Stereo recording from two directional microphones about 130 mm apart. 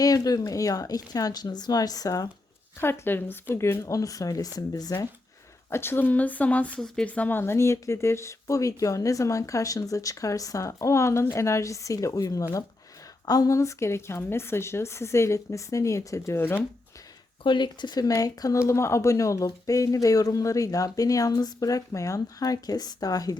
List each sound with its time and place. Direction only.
0.0 s speech: 30° left (ahead or behind)
2.8 s speech: 20° left (ahead or behind)
5.7 s speech: 15° left (ahead or behind)
17.4 s speech: 35° left (ahead or behind)